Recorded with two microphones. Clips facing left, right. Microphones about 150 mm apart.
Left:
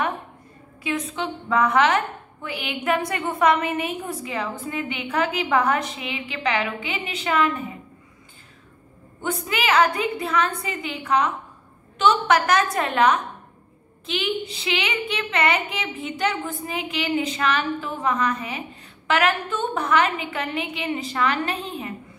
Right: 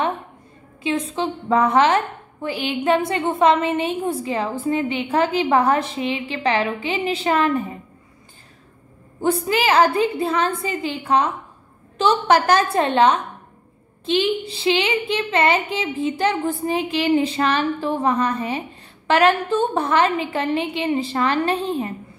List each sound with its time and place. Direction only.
0.8 s a woman's voice: 25° right (ahead or behind)
9.2 s a woman's voice: 35° right (ahead or behind)